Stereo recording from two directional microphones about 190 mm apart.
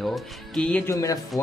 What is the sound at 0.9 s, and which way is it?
Speech, 15° left (ahead or behind).